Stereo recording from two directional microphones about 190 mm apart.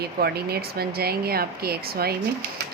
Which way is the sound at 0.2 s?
55° right (ahead or behind).